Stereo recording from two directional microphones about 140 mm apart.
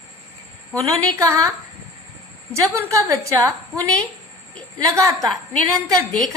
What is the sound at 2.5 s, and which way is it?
A woman's voice, 20° right (ahead or behind).